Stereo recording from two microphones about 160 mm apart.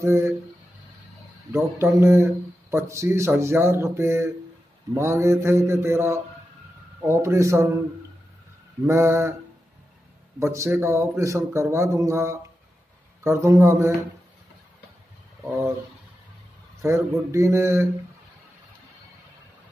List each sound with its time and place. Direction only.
0.0 s a man's voice: 15° right (ahead or behind)
1.5 s a man's voice: 15° right (ahead or behind)
8.8 s a man's voice: 15° right (ahead or behind)
10.4 s a man's voice: 15° right (ahead or behind)
16.8 s a man's voice: 15° right (ahead or behind)